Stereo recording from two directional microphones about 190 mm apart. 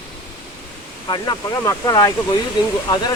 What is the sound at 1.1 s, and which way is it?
Speech, 20° left (ahead or behind).